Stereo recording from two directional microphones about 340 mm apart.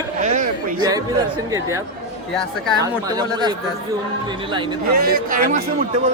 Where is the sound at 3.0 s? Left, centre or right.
Centre.